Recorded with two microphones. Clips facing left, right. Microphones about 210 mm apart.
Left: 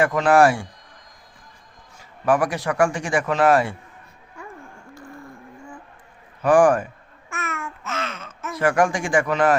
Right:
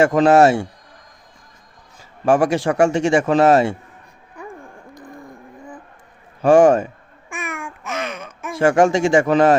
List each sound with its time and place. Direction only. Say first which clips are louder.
0.0 s a man's voice: right 4 dB; 30° right (ahead or behind)
2.2 s a man's voice: right 5 dB; 25° right (ahead or behind)
4.4 s music: right 5 dB; 15° right (ahead or behind)
6.4 s a man's voice: right 4 dB; 25° right (ahead or behind)
7.3 s babbling: right 2 dB; 15° right (ahead or behind)
8.5 s a man's voice: right 5 dB; 25° right (ahead or behind)